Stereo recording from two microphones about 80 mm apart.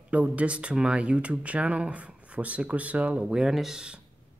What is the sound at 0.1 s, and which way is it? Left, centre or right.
Speech, centre.